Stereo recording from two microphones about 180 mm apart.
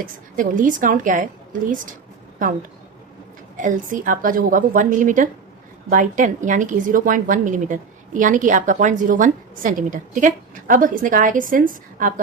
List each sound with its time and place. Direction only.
0.0 s a woman's voice: 50° right (ahead or behind)
3.6 s a woman's voice: 45° right (ahead or behind)